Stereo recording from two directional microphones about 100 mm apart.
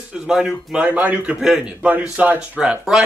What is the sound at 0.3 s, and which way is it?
Speech, 5° right (ahead or behind).